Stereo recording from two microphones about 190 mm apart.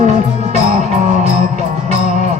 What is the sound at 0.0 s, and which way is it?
Music, 35° right (ahead or behind).